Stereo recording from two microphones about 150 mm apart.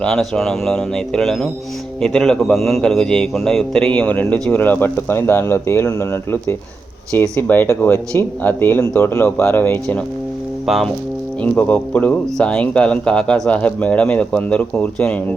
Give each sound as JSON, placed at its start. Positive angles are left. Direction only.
{"t": 0.0, "sound": "a man's voice", "side_deg": 5}
{"t": 11.4, "sound": "a man's voice", "side_deg": 10}